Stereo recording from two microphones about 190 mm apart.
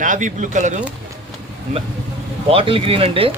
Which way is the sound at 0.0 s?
40° right (ahead or behind).